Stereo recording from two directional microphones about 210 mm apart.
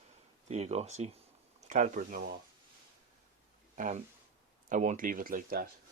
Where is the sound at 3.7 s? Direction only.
35° right (ahead or behind).